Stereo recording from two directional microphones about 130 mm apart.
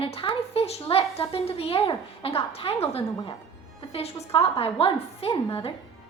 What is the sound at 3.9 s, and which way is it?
A woman's voice, 50° left (ahead or behind).